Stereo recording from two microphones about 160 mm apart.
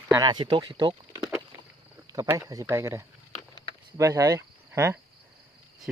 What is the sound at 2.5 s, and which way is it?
Speech, 20° right (ahead or behind).